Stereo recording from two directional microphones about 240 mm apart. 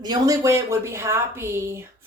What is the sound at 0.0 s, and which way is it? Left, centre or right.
Speech, centre.